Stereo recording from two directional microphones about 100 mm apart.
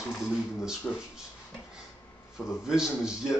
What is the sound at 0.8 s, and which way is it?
Speech, 10° left (ahead or behind).